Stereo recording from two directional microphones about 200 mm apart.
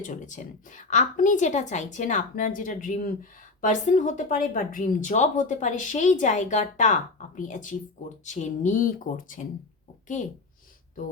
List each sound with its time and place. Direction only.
0.0 s a woman's voice: 40° left (ahead or behind)